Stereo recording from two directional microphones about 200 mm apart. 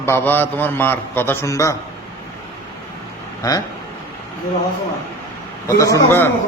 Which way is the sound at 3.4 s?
20° left (ahead or behind).